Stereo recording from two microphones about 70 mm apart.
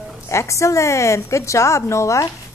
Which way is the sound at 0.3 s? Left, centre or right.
Left.